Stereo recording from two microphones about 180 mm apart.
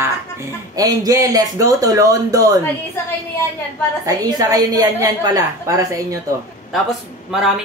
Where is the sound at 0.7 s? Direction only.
20° right (ahead or behind).